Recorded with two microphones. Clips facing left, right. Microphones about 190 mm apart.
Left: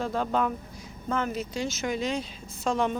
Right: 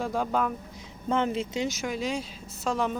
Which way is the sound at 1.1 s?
25° right (ahead or behind).